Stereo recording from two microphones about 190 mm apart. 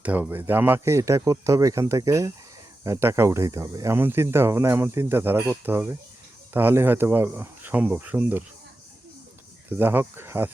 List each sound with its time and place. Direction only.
0.0 s speech: 10° right (ahead or behind)
9.7 s speech: 10° right (ahead or behind)